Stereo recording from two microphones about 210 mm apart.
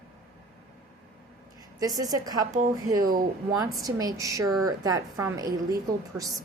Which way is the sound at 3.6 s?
15° right (ahead or behind).